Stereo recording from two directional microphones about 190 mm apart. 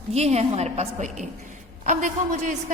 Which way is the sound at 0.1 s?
35° right (ahead or behind).